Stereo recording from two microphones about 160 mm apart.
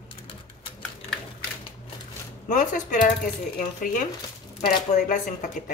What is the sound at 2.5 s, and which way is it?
Speech, 55° left (ahead or behind).